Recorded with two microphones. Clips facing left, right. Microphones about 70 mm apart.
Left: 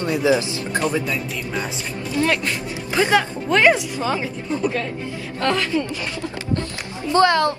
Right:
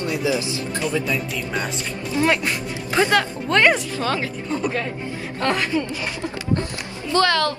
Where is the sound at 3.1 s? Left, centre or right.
Centre.